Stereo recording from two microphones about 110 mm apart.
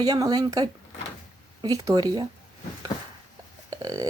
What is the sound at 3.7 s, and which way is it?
Burping, 35° right (ahead or behind).